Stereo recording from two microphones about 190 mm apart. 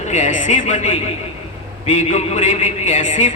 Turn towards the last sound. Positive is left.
turn(degrees=40)  # may be behind; listen again after turning